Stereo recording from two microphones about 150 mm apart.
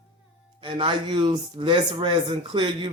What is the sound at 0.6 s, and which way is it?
Speech, 35° right (ahead or behind).